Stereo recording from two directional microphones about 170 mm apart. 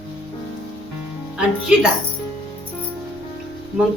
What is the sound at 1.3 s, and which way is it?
Speech, 5° right (ahead or behind).